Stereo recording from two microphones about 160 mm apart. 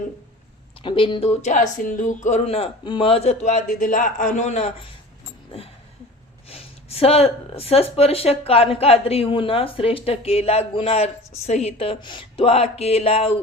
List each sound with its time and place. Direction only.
0.8 s speech: 35° left (ahead or behind)
6.5 s speech: 40° left (ahead or behind)